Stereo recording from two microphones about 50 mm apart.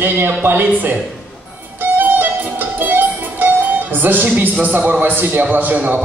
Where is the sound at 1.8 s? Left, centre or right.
Right.